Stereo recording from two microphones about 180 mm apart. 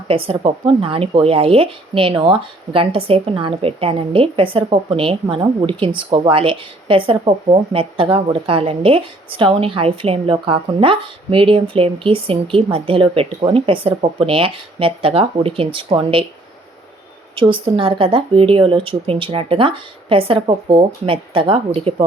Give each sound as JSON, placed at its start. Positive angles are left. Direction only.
{"t": 0.1, "sound": "speech", "side_deg": -30}
{"t": 17.3, "sound": "speech", "side_deg": -30}